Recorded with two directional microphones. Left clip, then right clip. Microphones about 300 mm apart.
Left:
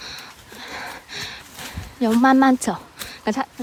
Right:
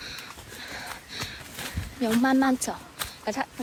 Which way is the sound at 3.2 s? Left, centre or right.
Left.